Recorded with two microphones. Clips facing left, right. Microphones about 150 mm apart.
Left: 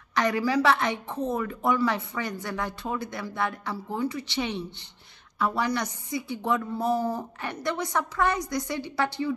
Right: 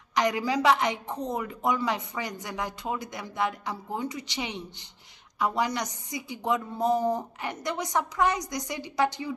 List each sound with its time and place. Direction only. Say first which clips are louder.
0.1 s a woman's voice: left 1 dB; 20° right (ahead or behind)